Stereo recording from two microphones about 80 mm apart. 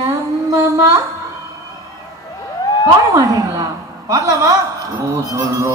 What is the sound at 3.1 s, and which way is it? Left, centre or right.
A woman's voice, right.